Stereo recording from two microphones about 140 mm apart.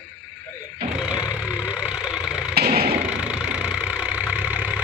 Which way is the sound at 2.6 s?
90° right.